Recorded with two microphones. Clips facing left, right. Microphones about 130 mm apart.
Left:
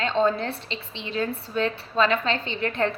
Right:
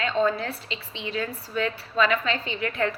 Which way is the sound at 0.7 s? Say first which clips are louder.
Right 1 dB; 15° right (ahead or behind).